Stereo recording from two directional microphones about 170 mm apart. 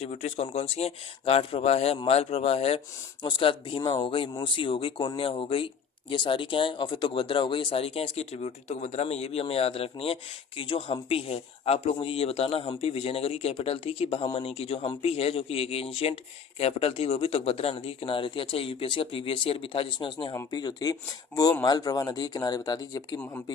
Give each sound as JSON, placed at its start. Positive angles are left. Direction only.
{"t": 0.0, "sound": "speech", "side_deg": 40}